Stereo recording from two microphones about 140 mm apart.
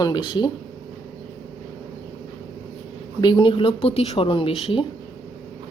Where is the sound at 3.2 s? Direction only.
35° left (ahead or behind).